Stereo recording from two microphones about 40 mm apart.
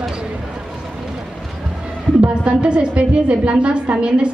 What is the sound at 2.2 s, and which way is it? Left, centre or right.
A woman's voice, right.